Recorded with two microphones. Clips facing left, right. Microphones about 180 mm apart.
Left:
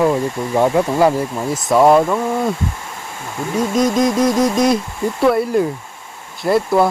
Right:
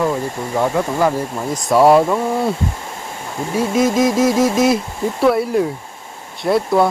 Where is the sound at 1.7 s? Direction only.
5° right (ahead or behind).